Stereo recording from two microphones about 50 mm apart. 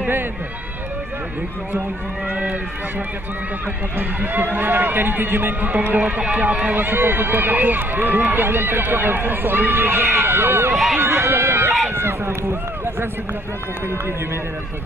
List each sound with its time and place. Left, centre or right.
3.9 s speech: right
5.9 s speech: right
6.8 s speech: right
10.7 s speech: centre
11.0 s speech: right